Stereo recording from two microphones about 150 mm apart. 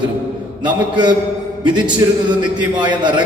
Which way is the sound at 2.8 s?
30° right (ahead or behind).